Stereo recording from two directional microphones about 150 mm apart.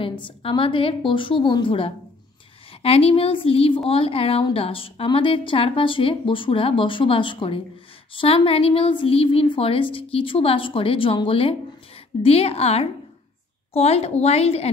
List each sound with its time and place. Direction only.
0.0 s a woman's voice: 35° left (ahead or behind)